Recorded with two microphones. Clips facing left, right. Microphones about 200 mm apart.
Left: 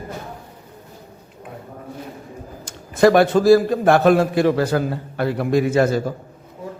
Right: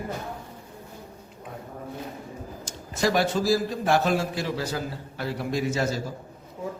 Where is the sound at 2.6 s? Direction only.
60° left (ahead or behind).